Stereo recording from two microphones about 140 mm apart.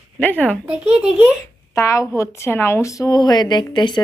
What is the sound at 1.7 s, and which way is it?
A woman's voice, 20° left (ahead or behind).